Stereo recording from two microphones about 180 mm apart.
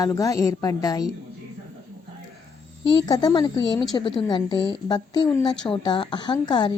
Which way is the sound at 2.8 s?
25° left (ahead or behind).